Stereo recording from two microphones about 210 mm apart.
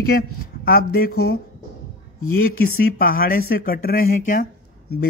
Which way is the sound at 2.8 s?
45° left (ahead or behind).